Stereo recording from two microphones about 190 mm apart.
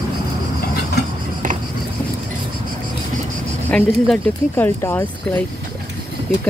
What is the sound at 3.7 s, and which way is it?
Speech, 10° left (ahead or behind).